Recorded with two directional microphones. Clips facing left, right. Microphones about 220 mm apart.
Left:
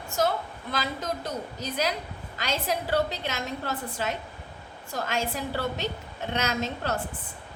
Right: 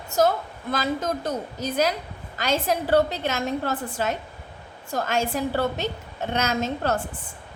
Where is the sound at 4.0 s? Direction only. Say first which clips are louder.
Right 5 dB; 45° right (ahead or behind).